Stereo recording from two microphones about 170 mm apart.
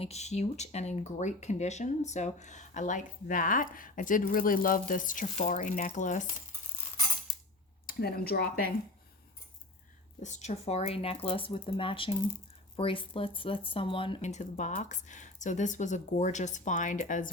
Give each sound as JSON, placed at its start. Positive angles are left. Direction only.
{"t": 0.0, "sound": "speech", "side_deg": 40}
{"t": 7.9, "sound": "speech", "side_deg": 60}
{"t": 10.2, "sound": "speech", "side_deg": 40}